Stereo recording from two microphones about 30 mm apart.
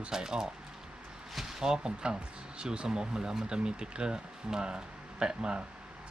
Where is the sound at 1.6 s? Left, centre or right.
Right.